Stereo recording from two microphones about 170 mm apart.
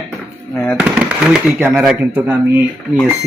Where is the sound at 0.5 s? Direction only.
10° left (ahead or behind).